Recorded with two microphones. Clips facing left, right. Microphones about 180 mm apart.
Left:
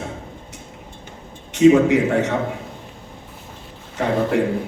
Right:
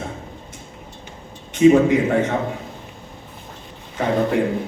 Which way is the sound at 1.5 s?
70° left (ahead or behind).